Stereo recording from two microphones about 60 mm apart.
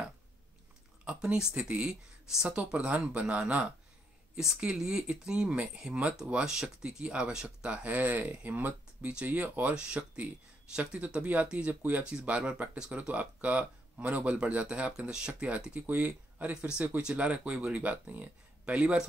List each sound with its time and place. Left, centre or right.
1.0 s speech: centre
2.5 s speech: right
7.7 s speech: right
12.0 s speech: centre